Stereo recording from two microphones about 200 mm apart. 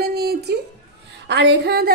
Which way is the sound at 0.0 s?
50° right (ahead or behind).